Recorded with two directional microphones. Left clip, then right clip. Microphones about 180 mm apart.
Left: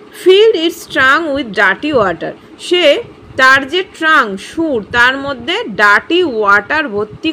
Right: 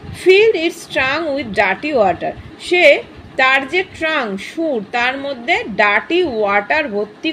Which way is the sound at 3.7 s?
50° left (ahead or behind).